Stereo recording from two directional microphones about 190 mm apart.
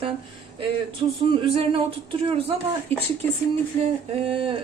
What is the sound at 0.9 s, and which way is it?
Speech, 30° right (ahead or behind).